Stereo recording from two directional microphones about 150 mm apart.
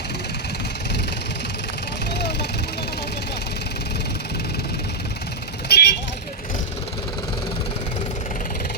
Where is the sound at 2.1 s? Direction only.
90° left.